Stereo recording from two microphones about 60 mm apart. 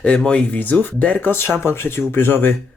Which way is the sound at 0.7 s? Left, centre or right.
Left.